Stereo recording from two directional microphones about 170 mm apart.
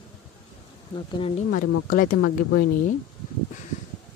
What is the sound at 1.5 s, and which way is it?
Speech, 55° left (ahead or behind).